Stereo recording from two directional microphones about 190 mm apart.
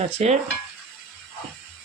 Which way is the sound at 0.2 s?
35° right (ahead or behind).